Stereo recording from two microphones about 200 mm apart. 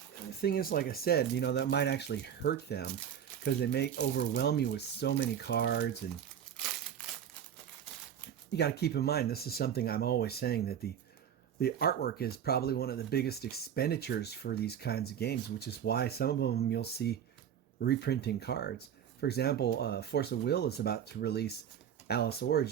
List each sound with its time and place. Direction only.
0.4 s speech: 50° left (ahead or behind)
8.5 s speech: 55° left (ahead or behind)